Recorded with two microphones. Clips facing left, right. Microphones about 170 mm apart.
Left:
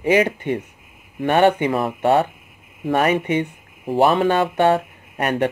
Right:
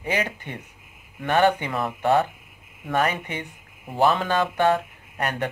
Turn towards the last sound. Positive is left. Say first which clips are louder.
# left 7 dB
turn(degrees=25)  # may be behind; listen again after turning